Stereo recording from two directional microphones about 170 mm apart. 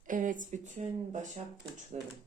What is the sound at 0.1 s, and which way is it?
Speech, 50° right (ahead or behind).